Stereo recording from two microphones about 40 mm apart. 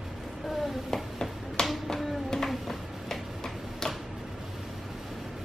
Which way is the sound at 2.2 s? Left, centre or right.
Centre.